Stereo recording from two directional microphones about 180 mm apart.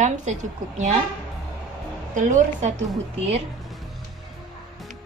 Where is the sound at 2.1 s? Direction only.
45° right (ahead or behind).